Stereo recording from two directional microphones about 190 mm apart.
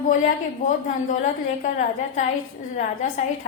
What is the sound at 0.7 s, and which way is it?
A woman's voice, 40° left (ahead or behind).